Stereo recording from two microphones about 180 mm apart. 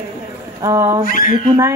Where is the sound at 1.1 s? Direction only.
50° left (ahead or behind).